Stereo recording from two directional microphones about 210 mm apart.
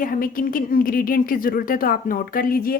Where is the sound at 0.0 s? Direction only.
40° left (ahead or behind).